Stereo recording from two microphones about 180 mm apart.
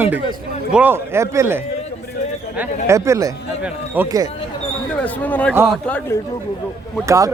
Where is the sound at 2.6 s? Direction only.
15° right (ahead or behind).